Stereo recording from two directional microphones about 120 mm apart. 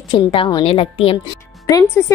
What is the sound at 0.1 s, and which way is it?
A woman's voice, 40° left (ahead or behind).